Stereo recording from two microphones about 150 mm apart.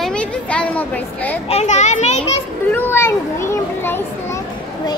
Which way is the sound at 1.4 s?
45° left (ahead or behind).